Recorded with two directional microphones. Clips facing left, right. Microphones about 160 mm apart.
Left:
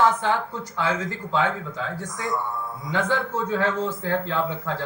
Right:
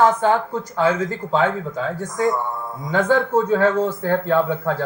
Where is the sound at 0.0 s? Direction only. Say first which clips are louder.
Right 5 dB; 45° right (ahead or behind).